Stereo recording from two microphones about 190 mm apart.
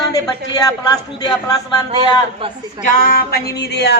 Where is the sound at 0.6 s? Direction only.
20° left (ahead or behind).